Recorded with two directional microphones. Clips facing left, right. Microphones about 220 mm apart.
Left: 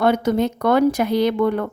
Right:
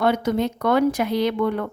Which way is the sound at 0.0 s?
45° left (ahead or behind).